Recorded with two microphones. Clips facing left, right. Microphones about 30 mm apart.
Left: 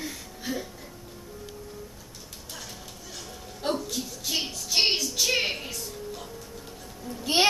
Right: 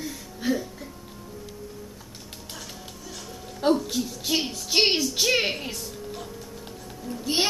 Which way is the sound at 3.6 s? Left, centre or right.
Right.